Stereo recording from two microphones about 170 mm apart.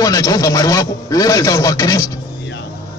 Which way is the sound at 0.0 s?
20° left (ahead or behind).